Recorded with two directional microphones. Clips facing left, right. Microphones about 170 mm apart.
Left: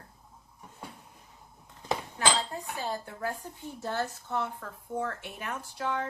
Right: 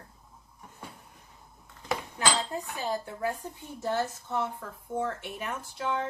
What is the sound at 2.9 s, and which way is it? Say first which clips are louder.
A woman's voice: right 3 dB; 15° right (ahead or behind).